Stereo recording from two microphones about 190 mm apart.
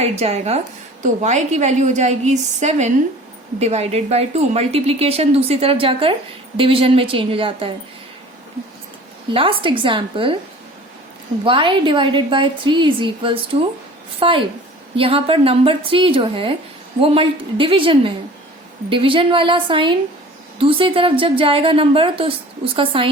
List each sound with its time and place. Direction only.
0.0 s a woman's voice: 35° right (ahead or behind)
9.3 s a woman's voice: 30° right (ahead or behind)
11.4 s a woman's voice: 25° right (ahead or behind)